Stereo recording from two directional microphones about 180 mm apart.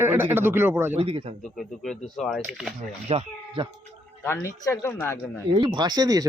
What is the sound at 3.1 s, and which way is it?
Speech, 30° right (ahead or behind).